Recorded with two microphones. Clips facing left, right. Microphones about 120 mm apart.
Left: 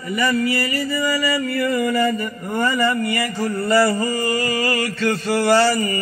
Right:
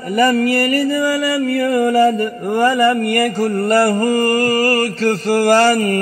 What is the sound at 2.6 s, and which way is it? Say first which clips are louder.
Mantra: right 6 dB; 60° right (ahead or behind).